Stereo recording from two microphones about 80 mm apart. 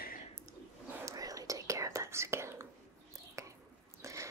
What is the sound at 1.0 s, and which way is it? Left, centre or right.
Whispering, right.